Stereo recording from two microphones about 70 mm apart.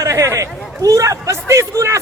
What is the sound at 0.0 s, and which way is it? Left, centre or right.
A man's voice, right.